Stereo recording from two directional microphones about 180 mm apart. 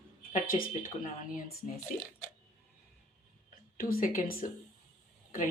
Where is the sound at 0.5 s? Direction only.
35° left (ahead or behind).